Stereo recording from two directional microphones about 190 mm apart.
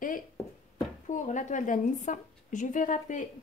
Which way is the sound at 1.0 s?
40° left (ahead or behind).